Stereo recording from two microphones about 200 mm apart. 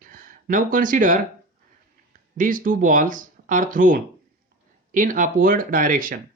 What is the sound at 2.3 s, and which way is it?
Speech, 40° right (ahead or behind).